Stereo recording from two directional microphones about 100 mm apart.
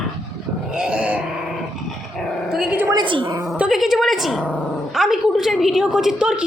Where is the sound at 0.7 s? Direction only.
10° right (ahead or behind).